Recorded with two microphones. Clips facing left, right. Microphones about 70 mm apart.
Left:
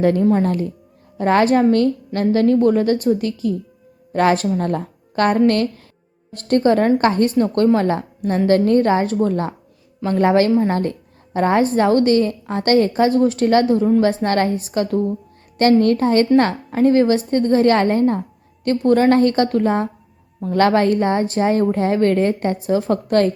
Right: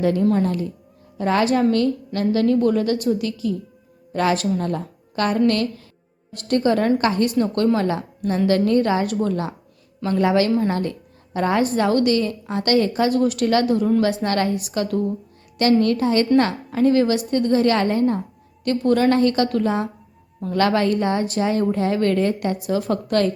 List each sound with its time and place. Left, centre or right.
0.0 s a woman's voice: left